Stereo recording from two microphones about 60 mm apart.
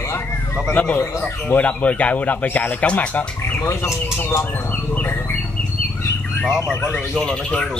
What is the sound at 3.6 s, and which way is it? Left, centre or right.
Speech, left.